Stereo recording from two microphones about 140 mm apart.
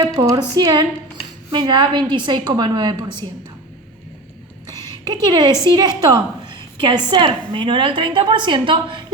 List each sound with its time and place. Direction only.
0.0 s a woman's voice: 30° right (ahead or behind)
5.0 s a woman's voice: 30° right (ahead or behind)